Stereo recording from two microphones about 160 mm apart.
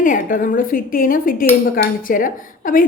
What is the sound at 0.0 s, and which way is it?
A woman's voice, 60° left (ahead or behind).